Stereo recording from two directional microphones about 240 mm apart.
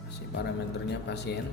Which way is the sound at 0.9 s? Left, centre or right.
Left.